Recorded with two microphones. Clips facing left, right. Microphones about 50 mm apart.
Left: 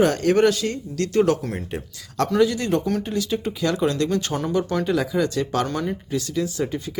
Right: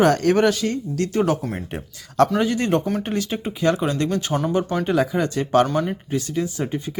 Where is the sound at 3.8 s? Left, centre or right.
Centre.